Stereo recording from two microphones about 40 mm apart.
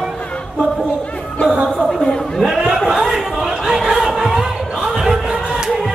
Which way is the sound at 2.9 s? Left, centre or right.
Centre.